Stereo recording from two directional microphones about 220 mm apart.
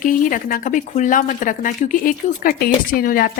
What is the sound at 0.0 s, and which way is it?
Speech, 40° left (ahead or behind).